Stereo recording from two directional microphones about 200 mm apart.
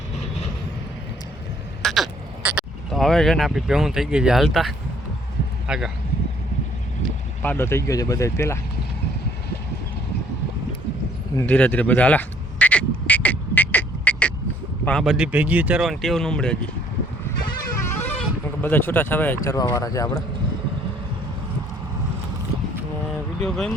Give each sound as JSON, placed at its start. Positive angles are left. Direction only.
{"t": 1.8, "sound": "crow", "side_deg": 0}
{"t": 5.6, "sound": "speech", "side_deg": -5}
{"t": 7.4, "sound": "speech", "side_deg": 10}
{"t": 11.3, "sound": "quack", "side_deg": 5}
{"t": 14.8, "sound": "speech", "side_deg": 0}
{"t": 17.8, "sound": "goat", "side_deg": 10}
{"t": 19.5, "sound": "speech", "side_deg": 15}
{"t": 23.4, "sound": "speech", "side_deg": 0}